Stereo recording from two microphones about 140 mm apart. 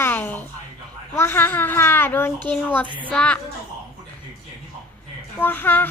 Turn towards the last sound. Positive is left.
turn(degrees=15)  # may be behind; listen again after turning